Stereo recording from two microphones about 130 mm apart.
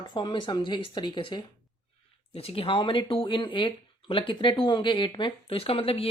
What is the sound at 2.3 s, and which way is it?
Speech, 45° left (ahead or behind).